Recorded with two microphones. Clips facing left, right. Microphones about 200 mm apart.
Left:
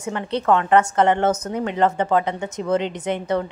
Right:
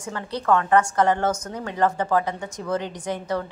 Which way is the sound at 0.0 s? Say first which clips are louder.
Left 5 dB; 20° left (ahead or behind).